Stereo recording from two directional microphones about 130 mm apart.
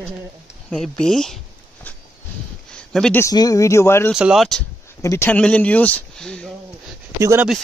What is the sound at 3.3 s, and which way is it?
Speech, 30° left (ahead or behind).